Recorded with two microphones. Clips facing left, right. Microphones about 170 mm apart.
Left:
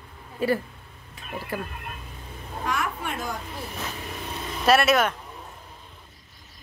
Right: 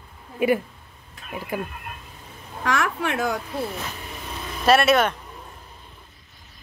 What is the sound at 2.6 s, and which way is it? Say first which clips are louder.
Speech: right 5 dB; 80° right.